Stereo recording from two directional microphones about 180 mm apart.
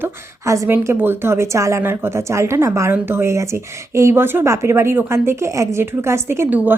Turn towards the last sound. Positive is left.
turn(degrees=-10)  # may be behind; listen again after turning